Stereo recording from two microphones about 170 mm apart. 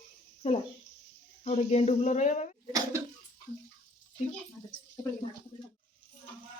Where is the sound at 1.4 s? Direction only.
40° left (ahead or behind).